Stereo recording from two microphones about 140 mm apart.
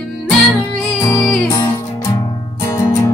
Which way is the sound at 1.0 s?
20° left (ahead or behind).